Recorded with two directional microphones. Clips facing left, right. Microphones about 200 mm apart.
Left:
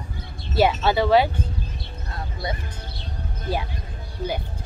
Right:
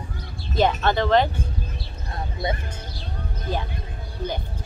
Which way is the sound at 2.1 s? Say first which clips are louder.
Right 3 dB; 20° right (ahead or behind).